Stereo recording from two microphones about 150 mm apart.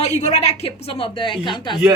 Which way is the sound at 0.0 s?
45° left (ahead or behind).